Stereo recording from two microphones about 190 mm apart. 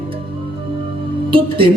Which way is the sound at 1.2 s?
25° right (ahead or behind).